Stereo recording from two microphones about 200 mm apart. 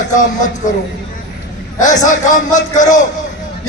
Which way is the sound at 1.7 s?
35° left (ahead or behind).